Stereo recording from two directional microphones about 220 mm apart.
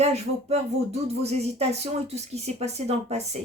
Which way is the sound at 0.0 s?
30° right (ahead or behind).